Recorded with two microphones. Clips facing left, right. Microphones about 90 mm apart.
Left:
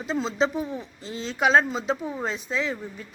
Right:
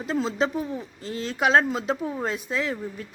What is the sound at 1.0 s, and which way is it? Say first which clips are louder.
Speech: right 4 dB; 55° right (ahead or behind).